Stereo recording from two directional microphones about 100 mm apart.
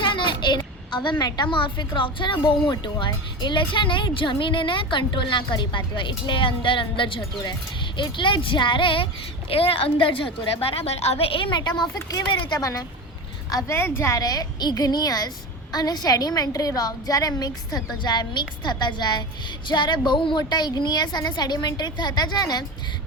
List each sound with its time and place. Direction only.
0.0 s a sound: 55° left (ahead or behind)
1.2 s a woman's voice: 50° left (ahead or behind)
9.5 s a woman's voice: 70° left (ahead or behind); by 12.5 s 50° left (ahead or behind)
12.5 s a woman's voice: 35° left (ahead or behind)
13.7 s a woman's voice: 25° left (ahead or behind)
14.2 s a woman's voice: 40° left (ahead or behind)